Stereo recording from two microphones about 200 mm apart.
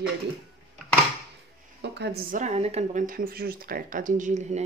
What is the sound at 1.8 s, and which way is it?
Speech, 55° right (ahead or behind).